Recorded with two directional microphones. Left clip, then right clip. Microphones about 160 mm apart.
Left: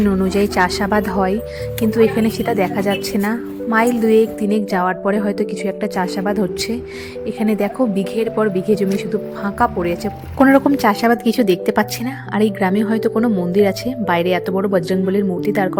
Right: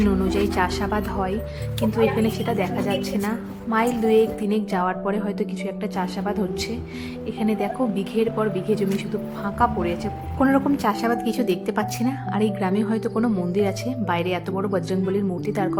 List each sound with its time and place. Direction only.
0.1 s a woman's voice: 40° left (ahead or behind)